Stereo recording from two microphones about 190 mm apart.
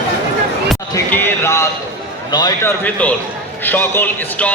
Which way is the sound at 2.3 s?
20° left (ahead or behind).